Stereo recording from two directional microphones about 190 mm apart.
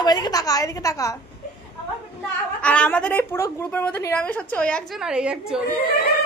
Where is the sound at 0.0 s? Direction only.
20° left (ahead or behind).